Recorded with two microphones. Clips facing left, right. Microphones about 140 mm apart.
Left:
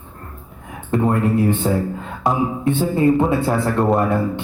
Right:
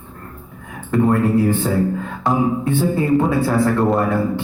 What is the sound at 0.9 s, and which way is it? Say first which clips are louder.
Speech: right 2 dB; 25° left (ahead or behind).